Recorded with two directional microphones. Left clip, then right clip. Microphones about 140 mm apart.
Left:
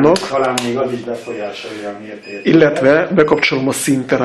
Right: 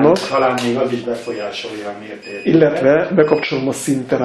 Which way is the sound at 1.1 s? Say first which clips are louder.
Right 1 dB; 5° right (ahead or behind).